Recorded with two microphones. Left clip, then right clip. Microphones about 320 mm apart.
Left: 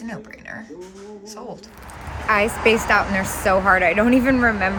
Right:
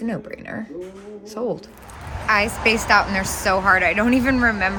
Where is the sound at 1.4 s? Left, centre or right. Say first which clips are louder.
Right 11 dB; right.